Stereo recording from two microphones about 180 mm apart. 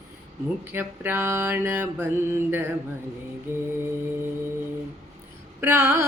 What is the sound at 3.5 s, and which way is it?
Music, 15° right (ahead or behind).